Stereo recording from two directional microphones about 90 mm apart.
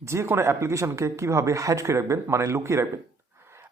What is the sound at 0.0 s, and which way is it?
A man's voice, 30° right (ahead or behind).